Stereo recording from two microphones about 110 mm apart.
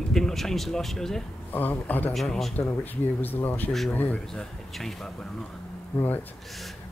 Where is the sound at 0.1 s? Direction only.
Centre (ahead or behind).